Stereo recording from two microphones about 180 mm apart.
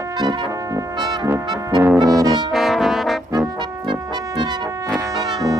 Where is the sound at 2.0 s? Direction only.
20° right (ahead or behind).